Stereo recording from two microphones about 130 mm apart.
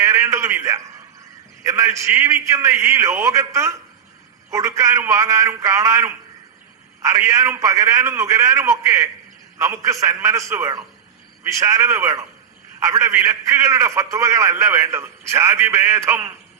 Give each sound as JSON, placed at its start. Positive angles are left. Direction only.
{"t": 0.0, "sound": "a man's voice", "side_deg": -25}